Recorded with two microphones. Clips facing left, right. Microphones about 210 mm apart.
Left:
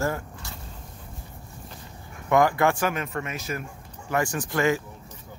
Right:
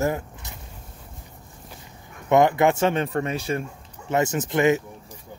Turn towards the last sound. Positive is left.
turn(degrees=-20)  # may be behind; listen again after turning